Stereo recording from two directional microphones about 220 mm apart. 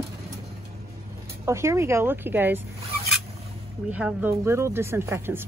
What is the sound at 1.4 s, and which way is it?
Speech, 10° right (ahead or behind).